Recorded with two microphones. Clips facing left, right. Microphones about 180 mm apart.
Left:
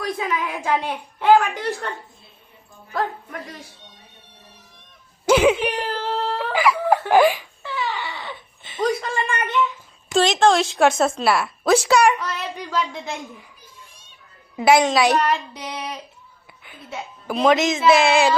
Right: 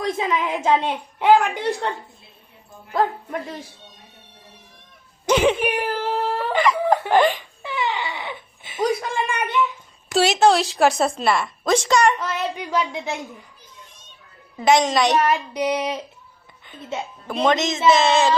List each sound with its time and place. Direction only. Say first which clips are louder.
0.0 s a woman's voice: right 2 dB; 25° right (ahead or behind)
2.9 s speech: right 4 dB; 25° right (ahead or behind)
5.2 s speech: left 2 dB; 5° left (ahead or behind)
5.6 s speech: right 2 dB; 10° right (ahead or behind)
6.5 s a sound: even; 5° left (ahead or behind)
7.1 s a woman's voice: left 3 dB; 5° left (ahead or behind)
7.6 s a sound: right 2 dB; 20° right (ahead or behind)
10.1 s a woman's voice: even; 5° right (ahead or behind)
12.7 s a sound: right 1 dB; 10° right (ahead or behind)
14.5 s a woman's voice: left 1 dB; 10° left (ahead or behind)
15.3 s a sound: right 4 dB; 15° right (ahead or behind)
17.2 s a woman's voice: left 3 dB; 5° left (ahead or behind)